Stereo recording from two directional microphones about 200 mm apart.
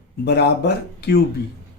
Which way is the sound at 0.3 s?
55° left (ahead or behind).